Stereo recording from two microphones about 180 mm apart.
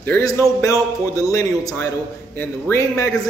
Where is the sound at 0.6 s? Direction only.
20° left (ahead or behind).